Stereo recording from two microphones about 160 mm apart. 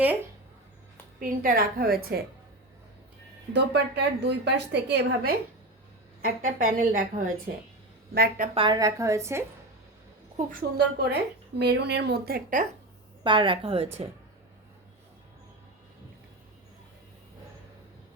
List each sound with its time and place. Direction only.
1.2 s a woman's voice: 60° right (ahead or behind)
3.5 s a woman's voice: 90° right
6.2 s a woman's voice: 60° right (ahead or behind)
8.1 s a woman's voice: 70° right (ahead or behind)
8.5 s a woman's voice: 25° right (ahead or behind)
10.5 s a woman's voice: 75° right (ahead or behind); by 12.6 s 60° right (ahead or behind)
13.2 s a woman's voice: 30° right (ahead or behind)